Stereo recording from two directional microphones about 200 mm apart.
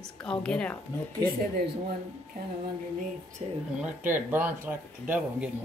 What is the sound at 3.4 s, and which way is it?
Speech, 30° right (ahead or behind).